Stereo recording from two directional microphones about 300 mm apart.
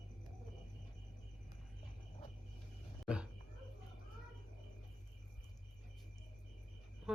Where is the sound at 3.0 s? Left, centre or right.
Centre.